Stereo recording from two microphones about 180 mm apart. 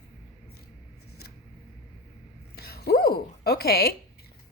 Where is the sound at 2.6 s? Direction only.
60° left (ahead or behind).